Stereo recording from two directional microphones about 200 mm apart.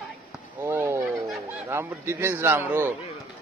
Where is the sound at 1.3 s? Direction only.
10° right (ahead or behind).